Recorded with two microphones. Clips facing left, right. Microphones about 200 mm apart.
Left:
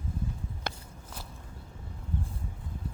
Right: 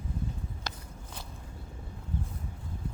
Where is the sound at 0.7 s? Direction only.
55° left (ahead or behind).